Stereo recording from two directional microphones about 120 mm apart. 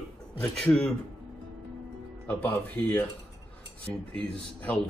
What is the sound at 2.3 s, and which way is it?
Speech, 15° left (ahead or behind).